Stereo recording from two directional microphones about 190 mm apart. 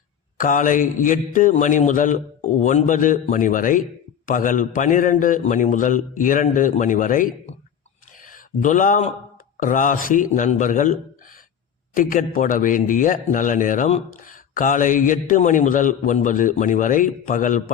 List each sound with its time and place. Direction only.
0.3 s a man's voice: 45° left (ahead or behind)
8.2 s a sound: 45° left (ahead or behind)
9.6 s a man's voice: 45° left (ahead or behind)
11.9 s a man's voice: 45° left (ahead or behind)